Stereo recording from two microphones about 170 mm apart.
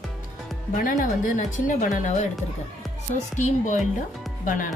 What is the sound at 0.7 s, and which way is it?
Speech, 50° left (ahead or behind).